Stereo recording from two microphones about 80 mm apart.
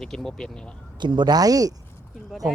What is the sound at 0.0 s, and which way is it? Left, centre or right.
Speech, centre.